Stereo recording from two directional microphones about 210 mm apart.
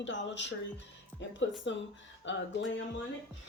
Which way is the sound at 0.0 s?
60° left (ahead or behind).